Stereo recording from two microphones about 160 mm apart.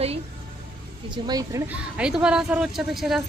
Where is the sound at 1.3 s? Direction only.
25° right (ahead or behind).